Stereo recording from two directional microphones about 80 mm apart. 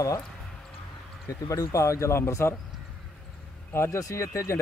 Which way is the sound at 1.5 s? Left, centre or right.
Left.